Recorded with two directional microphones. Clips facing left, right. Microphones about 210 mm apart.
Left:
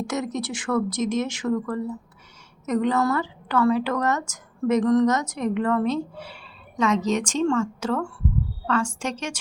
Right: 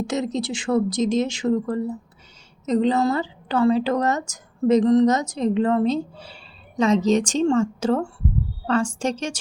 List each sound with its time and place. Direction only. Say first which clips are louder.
0.1 s a woman's voice: right 3 dB; 30° right (ahead or behind)